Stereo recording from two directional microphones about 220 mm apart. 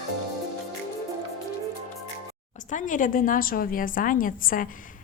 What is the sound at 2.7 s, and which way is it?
A woman's voice, 35° left (ahead or behind).